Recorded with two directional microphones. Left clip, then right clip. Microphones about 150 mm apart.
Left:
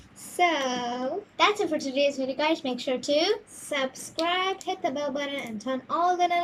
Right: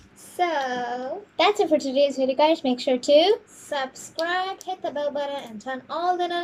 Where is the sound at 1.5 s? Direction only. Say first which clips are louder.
Right 6 dB; 25° right (ahead or behind).